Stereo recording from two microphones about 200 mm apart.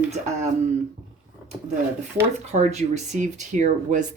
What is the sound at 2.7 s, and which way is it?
Speech, 35° right (ahead or behind).